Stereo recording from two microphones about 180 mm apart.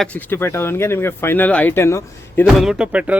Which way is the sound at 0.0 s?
10° left (ahead or behind).